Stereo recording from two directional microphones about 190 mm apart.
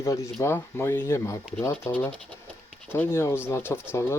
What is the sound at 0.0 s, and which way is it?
Speech, 15° left (ahead or behind).